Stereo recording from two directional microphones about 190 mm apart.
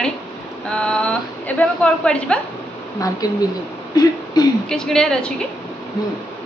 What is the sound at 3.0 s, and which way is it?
Speech, 20° left (ahead or behind).